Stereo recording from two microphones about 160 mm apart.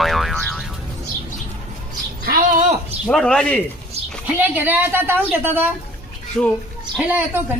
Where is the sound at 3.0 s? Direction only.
5° left (ahead or behind).